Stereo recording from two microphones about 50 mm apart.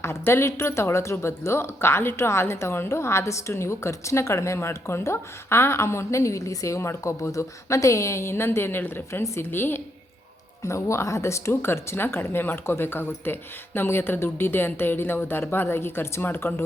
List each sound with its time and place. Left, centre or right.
0.0 s a woman's voice: left
0.5 s a woman's voice: left
10.6 s a woman's voice: left
11.6 s speech: left